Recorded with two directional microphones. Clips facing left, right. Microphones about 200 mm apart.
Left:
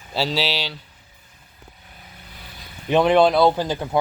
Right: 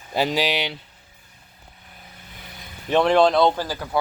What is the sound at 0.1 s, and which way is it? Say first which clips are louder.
Speech: right 2 dB; 15° right (ahead or behind).